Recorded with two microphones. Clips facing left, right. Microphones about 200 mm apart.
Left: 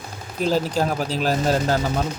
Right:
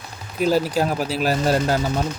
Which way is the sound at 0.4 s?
10° right (ahead or behind).